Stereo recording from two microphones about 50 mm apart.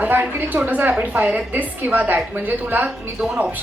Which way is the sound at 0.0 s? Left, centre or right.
Right.